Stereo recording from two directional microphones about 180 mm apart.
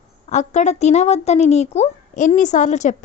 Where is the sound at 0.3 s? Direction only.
40° left (ahead or behind).